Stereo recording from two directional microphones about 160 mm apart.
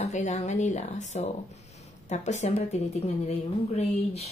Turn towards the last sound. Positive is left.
turn(degrees=40)  # may be behind; listen again after turning